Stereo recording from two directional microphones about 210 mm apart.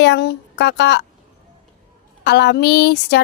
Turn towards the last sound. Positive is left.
turn(degrees=50)  # may be behind; listen again after turning